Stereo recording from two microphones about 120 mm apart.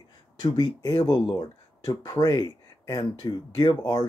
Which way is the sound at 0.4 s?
30° left (ahead or behind).